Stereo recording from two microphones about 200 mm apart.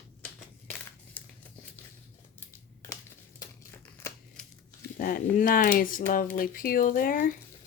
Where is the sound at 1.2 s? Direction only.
5° left (ahead or behind).